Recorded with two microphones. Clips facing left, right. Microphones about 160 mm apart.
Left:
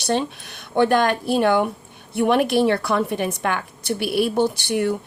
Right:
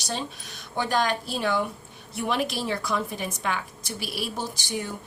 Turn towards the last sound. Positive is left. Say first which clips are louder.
# left 11 dB
turn(degrees=60)  # may be behind; listen again after turning